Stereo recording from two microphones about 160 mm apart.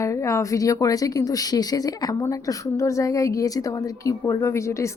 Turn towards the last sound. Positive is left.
turn(degrees=20)  # may be behind; listen again after turning